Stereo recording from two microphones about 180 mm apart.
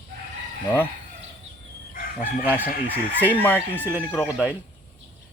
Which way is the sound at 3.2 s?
10° left (ahead or behind).